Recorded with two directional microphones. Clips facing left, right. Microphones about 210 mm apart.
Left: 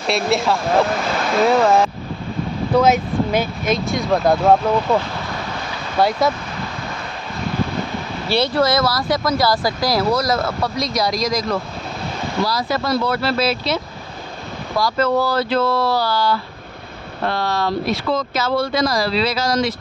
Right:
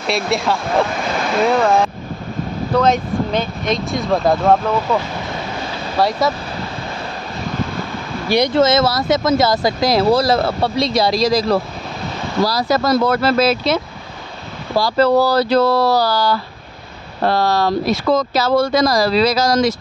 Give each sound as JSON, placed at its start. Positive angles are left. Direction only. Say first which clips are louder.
{"t": 0.0, "sound": "speech", "louder": "even", "side_deg": 0}
{"t": 5.9, "sound": "speech", "louder": "even", "side_deg": 0}
{"t": 8.3, "sound": "speech", "louder": "right 3 dB", "side_deg": -15}
{"t": 14.8, "sound": "speech", "louder": "right 4 dB", "side_deg": -30}